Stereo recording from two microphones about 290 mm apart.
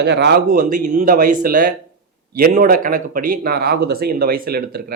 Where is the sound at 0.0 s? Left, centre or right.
Right.